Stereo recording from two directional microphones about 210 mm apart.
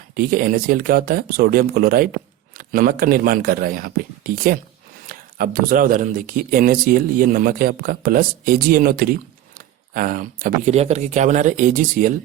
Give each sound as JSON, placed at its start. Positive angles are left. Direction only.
{"t": 0.1, "sound": "speech", "side_deg": -40}
{"t": 5.0, "sound": "speech", "side_deg": -40}